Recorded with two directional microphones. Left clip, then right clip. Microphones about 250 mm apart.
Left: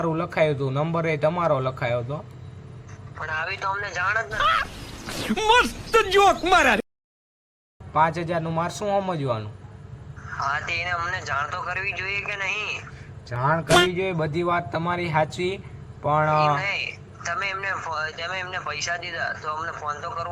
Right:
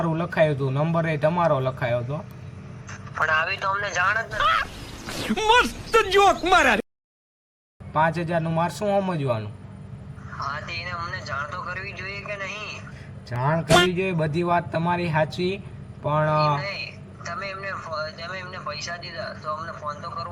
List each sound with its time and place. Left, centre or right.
0.0 s speech: centre
3.2 s a man's voice: centre
3.4 s speech: centre
7.9 s speech: centre
10.2 s speech: left
13.3 s speech: centre
16.6 s a man's voice: left